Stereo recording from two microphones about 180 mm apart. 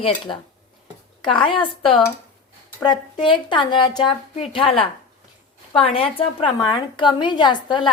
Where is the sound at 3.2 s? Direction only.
25° left (ahead or behind).